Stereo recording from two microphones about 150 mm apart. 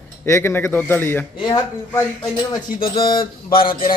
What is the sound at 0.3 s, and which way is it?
Speech, 15° left (ahead or behind).